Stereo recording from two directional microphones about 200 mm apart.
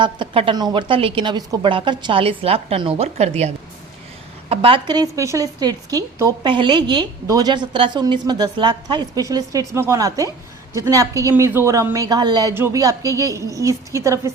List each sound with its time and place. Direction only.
0.0 s a woman's voice: 25° right (ahead or behind)